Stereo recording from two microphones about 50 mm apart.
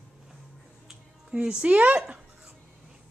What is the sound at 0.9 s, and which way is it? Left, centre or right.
Music, centre.